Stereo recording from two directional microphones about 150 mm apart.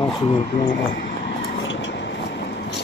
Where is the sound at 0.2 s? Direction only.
30° left (ahead or behind).